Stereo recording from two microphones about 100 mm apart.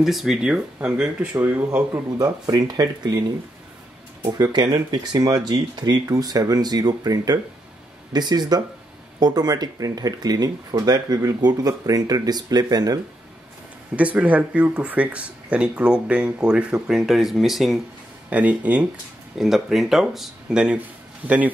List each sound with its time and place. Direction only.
0.0 s speech: centre (ahead or behind)
2.0 s speech: 40° right (ahead or behind)
4.2 s speech: 40° right (ahead or behind)
13.9 s speech: 15° right (ahead or behind)
18.3 s speech: 15° right (ahead or behind)
19.3 s speech: 5° right (ahead or behind)